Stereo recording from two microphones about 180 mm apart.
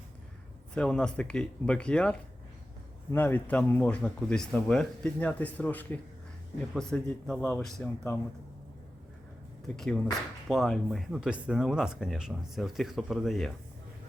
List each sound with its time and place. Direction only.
0.7 s speech: 5° left (ahead or behind)
9.7 s speech: centre (ahead or behind)